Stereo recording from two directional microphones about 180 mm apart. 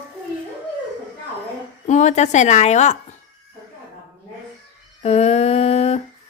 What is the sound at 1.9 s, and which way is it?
A woman's voice, 40° left (ahead or behind).